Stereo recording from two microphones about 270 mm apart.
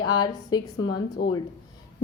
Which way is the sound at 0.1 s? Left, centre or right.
Centre.